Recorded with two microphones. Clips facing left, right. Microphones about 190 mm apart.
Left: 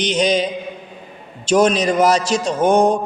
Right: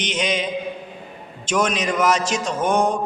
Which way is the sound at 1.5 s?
35° left (ahead or behind).